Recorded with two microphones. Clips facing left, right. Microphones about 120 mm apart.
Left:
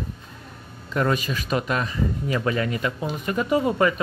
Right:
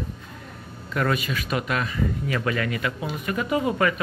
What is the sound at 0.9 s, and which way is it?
Speech, 30° left (ahead or behind).